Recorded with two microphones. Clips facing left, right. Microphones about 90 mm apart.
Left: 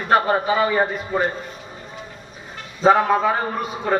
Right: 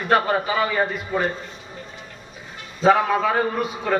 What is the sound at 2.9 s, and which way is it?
Speech, 30° left (ahead or behind).